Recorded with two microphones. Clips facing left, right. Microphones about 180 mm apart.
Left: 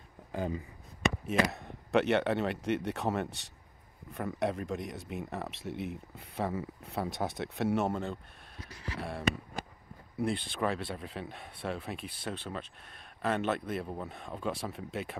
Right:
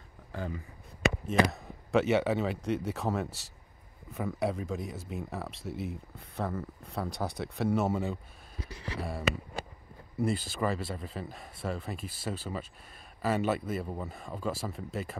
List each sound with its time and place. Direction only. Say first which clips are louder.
0.3 s a sound: left 3 dB; 15° left (ahead or behind)
1.2 s speech: right 4 dB; centre (ahead or behind)
10.1 s speech: right 2 dB; centre (ahead or behind)